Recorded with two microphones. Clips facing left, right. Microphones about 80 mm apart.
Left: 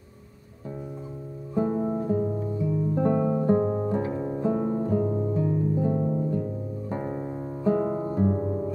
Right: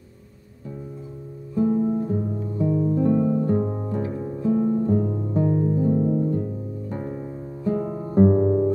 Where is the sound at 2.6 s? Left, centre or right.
Right.